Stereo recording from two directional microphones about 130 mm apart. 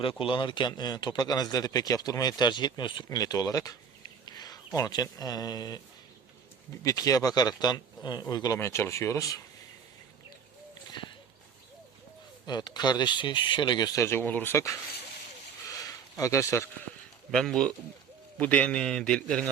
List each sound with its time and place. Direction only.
0.0 s speech: 40° left (ahead or behind)
6.8 s speech: 25° left (ahead or behind)
8.5 s speech: 20° left (ahead or behind)
12.5 s speech: 35° left (ahead or behind)
15.8 s a sound: 25° left (ahead or behind)
17.3 s a man's voice: 5° left (ahead or behind)